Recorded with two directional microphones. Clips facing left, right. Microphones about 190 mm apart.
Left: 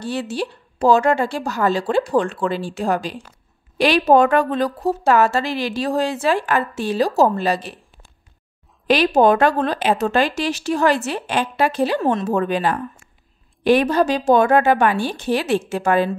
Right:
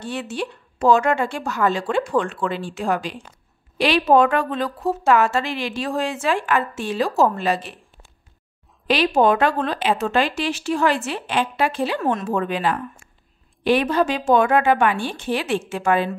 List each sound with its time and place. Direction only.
0.0 s speech: 35° left (ahead or behind)
8.8 s speech: 45° left (ahead or behind)